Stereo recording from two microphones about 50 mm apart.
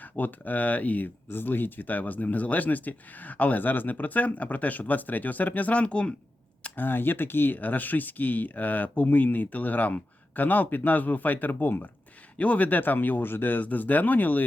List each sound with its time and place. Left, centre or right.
0.0 s speech: left
6.7 s speech: left
12.4 s speech: left